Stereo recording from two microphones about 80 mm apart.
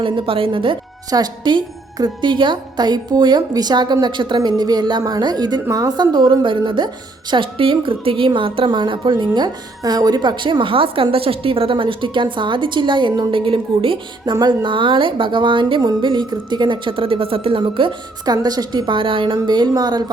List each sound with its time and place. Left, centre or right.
0.0 s a woman's voice: right
1.1 s a woman's voice: right
4.0 s a woman's voice: right
6.4 s a woman's voice: right
14.3 s a woman's voice: right
15.8 s a woman's voice: right
16.0 s a woman's voice: right
17.6 s a woman's voice: right
18.4 s a woman's voice: right
18.9 s a woman's voice: right
19.5 s a woman's voice: right